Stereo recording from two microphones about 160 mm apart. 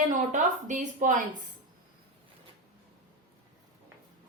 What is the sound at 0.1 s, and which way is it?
A woman's voice, 55° right (ahead or behind).